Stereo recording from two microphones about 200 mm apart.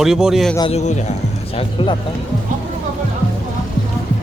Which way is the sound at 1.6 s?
25° left (ahead or behind).